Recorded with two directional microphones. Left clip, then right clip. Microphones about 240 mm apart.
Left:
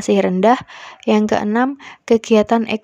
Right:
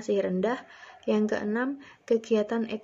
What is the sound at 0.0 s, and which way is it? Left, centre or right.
Speech, left.